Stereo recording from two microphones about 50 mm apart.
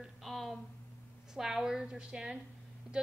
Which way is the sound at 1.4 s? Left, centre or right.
Centre.